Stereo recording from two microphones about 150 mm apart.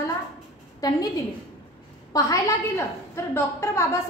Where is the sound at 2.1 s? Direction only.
20° left (ahead or behind).